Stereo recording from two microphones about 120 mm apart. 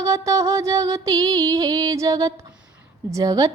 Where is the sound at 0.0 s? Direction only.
25° right (ahead or behind).